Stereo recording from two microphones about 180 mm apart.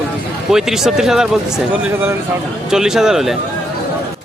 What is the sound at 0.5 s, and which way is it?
Speech, centre (ahead or behind).